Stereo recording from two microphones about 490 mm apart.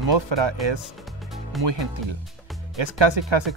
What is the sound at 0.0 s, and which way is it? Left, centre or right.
Speech, right.